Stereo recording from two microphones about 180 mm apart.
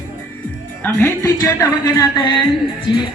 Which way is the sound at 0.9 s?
10° left (ahead or behind).